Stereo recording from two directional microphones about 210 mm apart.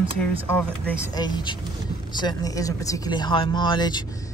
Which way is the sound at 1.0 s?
20° left (ahead or behind).